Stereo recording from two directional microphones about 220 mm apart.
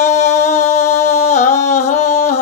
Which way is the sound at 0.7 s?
30° left (ahead or behind).